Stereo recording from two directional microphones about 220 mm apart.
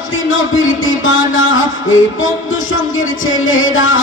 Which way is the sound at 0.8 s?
65° left (ahead or behind).